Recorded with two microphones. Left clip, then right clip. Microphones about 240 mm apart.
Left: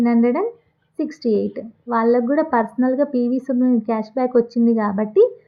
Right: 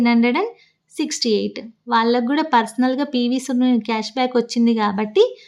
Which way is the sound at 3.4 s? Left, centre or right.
Centre.